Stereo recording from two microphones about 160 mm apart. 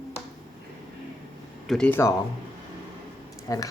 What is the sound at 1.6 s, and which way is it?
Speech, 5° left (ahead or behind).